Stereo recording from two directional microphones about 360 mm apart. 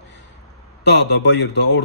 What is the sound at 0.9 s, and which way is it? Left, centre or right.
Speech, left.